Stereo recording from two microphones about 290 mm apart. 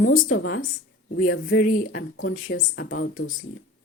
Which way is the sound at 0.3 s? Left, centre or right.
Left.